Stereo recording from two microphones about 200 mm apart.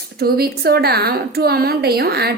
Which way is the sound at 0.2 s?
50° right (ahead or behind).